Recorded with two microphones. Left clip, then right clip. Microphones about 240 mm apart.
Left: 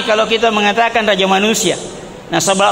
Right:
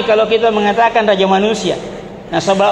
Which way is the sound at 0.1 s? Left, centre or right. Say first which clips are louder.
Right 1 dB; left.